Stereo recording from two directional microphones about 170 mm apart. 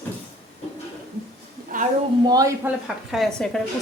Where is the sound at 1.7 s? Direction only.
50° right (ahead or behind).